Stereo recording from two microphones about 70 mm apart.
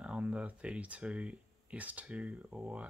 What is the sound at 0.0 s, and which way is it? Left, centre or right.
Speech, centre.